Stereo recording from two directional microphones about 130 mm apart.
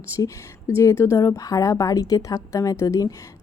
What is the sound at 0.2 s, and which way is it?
Speech, 25° left (ahead or behind).